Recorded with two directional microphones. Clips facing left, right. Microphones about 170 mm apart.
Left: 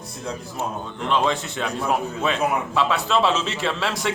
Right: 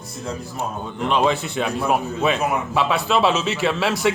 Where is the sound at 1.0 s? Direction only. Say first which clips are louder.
Right 3 dB; 15° right (ahead or behind).